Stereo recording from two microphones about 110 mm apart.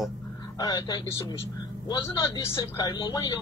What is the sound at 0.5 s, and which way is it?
Speech, 35° left (ahead or behind).